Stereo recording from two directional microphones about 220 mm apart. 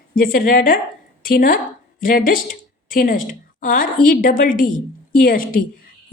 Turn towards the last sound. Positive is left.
turn(degrees=40)  # may be behind; listen again after turning